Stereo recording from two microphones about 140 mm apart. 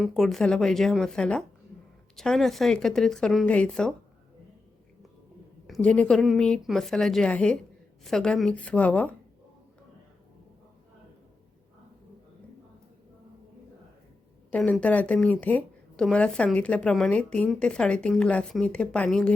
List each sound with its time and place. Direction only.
0.0 s speech: centre (ahead or behind)
5.6 s speech: 5° left (ahead or behind)
14.5 s speech: 10° left (ahead or behind)